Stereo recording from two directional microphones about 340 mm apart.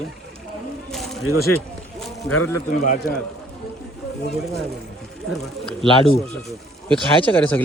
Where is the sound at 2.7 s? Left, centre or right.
Left.